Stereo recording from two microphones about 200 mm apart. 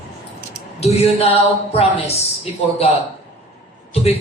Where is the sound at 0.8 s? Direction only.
30° left (ahead or behind).